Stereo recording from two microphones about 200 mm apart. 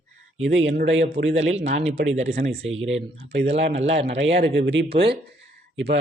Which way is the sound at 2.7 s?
75° right (ahead or behind).